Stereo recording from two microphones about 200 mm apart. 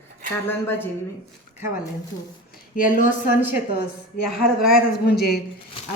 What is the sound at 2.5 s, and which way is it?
Speech, 45° left (ahead or behind).